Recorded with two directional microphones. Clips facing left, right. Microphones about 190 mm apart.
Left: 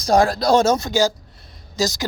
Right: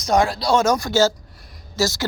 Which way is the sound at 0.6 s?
20° left (ahead or behind).